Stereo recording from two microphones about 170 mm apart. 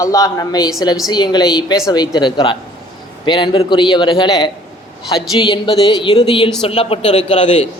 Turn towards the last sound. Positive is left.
turn(degrees=40)  # may be behind; listen again after turning